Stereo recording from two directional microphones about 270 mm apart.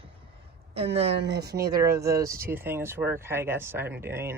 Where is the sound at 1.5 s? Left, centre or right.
Centre.